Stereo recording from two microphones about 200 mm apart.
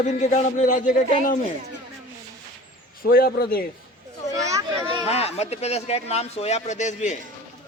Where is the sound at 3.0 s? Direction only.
50° left (ahead or behind).